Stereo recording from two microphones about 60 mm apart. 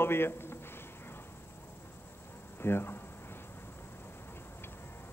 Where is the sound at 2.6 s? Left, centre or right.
Left.